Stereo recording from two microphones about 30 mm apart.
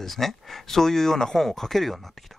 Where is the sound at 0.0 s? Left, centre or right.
Centre.